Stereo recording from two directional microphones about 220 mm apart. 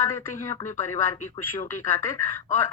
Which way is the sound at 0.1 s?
10° left (ahead or behind).